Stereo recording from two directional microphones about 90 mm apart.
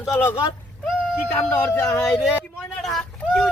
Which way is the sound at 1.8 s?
35° left (ahead or behind).